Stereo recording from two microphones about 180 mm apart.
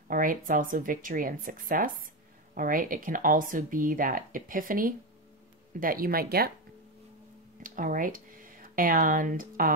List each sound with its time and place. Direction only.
0.1 s speech: 50° right (ahead or behind)
7.6 s speech: 50° right (ahead or behind)